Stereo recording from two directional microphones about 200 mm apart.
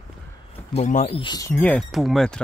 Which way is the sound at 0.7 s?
35° left (ahead or behind).